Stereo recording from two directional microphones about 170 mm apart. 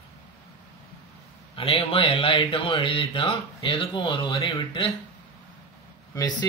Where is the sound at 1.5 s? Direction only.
30° left (ahead or behind).